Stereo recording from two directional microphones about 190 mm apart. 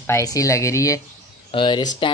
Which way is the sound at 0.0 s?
15° left (ahead or behind).